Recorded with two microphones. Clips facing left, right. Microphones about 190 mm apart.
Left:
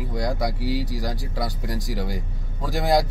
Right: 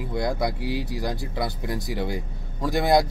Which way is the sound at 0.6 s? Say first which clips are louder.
Left 1 dB; 60° right (ahead or behind).